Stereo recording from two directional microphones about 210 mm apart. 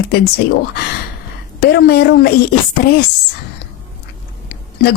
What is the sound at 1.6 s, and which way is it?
Speech, 50° left (ahead or behind).